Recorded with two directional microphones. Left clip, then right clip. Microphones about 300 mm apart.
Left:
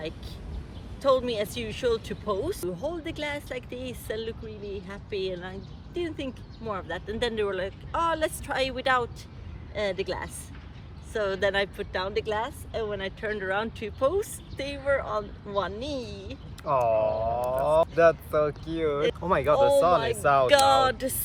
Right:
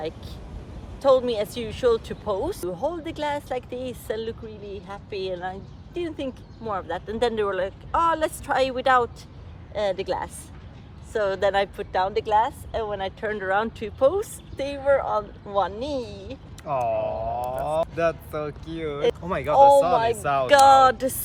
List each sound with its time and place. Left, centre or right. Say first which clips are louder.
1.0 s speech: right 4 dB; centre
16.6 s speech: left 1 dB; centre
20.5 s speech: right 11 dB; centre